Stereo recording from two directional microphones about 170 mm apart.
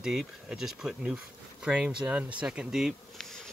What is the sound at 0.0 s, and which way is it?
Speech, 5° right (ahead or behind).